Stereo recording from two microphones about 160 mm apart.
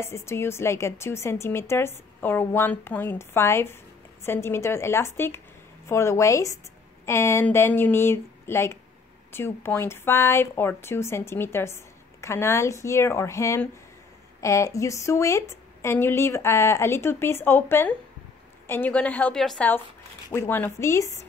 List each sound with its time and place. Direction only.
0.0 s a woman's voice: 15° left (ahead or behind)